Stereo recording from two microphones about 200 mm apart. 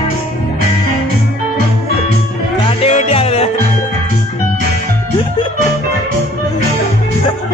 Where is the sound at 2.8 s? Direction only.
30° left (ahead or behind).